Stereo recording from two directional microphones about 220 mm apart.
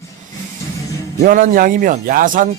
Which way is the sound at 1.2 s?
35° right (ahead or behind).